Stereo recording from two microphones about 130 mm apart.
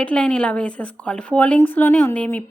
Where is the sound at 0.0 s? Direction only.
10° left (ahead or behind).